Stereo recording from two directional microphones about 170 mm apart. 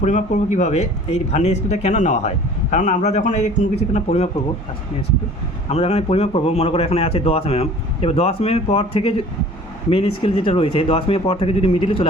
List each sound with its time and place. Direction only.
0.0 s a man's voice: 45° left (ahead or behind)
5.6 s a man's voice: 40° left (ahead or behind)